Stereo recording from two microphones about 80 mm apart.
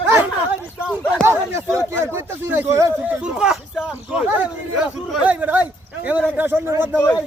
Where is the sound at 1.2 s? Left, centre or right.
Right.